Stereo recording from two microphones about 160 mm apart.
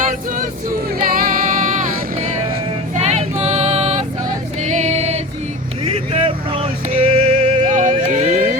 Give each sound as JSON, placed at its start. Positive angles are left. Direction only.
{"t": 0.0, "sound": "choir", "side_deg": -55}
{"t": 1.1, "sound": "music", "side_deg": -60}
{"t": 3.0, "sound": "female singing", "side_deg": -40}
{"t": 4.6, "sound": "music", "side_deg": -45}
{"t": 5.8, "sound": "a sound", "side_deg": -40}
{"t": 7.7, "sound": "a sound", "side_deg": -50}